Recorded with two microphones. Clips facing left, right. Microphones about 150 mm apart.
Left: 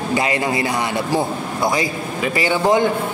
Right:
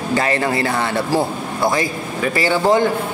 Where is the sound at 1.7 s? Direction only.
20° left (ahead or behind).